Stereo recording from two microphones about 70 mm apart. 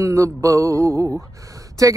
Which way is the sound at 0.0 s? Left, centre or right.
Right.